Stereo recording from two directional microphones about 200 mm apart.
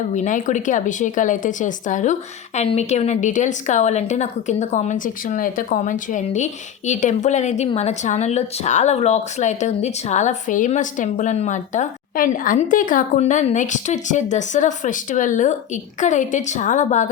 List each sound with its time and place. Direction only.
0.1 s a woman's voice: 40° left (ahead or behind)